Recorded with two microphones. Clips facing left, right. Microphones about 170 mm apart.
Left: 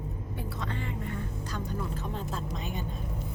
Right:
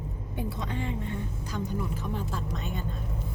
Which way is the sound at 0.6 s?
20° right (ahead or behind).